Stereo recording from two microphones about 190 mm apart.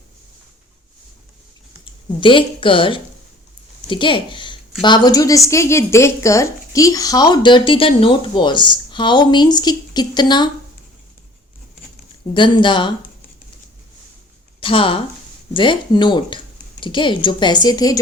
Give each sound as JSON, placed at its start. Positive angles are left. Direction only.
{"t": 1.8, "sound": "a woman's voice", "side_deg": 25}
{"t": 12.3, "sound": "a woman's voice", "side_deg": 25}
{"t": 14.6, "sound": "a woman's voice", "side_deg": 25}